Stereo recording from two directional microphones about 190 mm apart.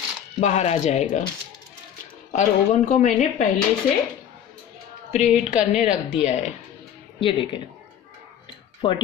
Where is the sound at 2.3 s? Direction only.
40° left (ahead or behind).